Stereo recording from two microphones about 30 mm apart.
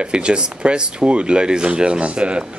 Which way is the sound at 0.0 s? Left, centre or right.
Right.